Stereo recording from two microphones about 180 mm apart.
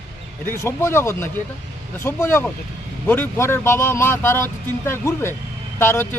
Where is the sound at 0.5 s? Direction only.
15° left (ahead or behind).